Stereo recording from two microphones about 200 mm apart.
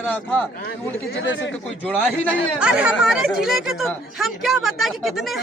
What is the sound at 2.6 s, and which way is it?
Speech, 5° right (ahead or behind).